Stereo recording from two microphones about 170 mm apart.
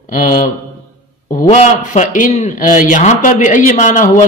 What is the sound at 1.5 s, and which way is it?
A man's voice, 45° left (ahead or behind).